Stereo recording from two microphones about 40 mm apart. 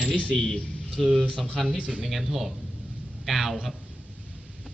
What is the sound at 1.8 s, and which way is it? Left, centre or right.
Speech, right.